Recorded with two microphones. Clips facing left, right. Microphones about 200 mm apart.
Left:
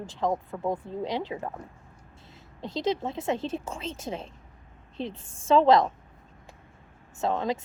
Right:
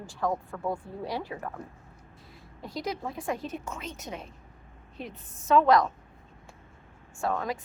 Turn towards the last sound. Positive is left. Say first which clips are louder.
# left 3 dB
turn(degrees=25)  # may be behind; listen again after turning